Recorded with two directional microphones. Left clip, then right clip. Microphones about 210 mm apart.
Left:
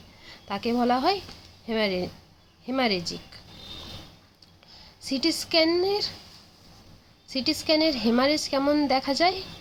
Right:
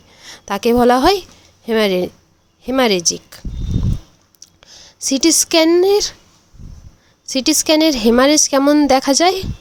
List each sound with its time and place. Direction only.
0.2 s a woman's voice: 55° right (ahead or behind)
7.3 s a woman's voice: 55° right (ahead or behind)